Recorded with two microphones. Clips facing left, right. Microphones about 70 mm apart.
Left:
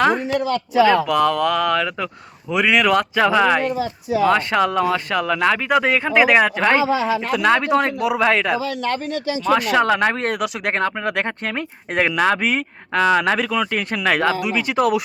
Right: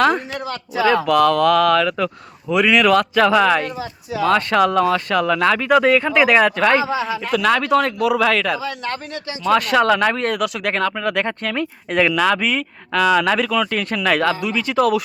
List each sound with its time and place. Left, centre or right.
1.0 s speech: centre
13.4 s speech: centre